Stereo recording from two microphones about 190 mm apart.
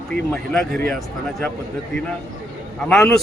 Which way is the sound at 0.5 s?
Centre (ahead or behind).